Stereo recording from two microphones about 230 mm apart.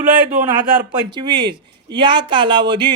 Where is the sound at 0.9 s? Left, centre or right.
Centre.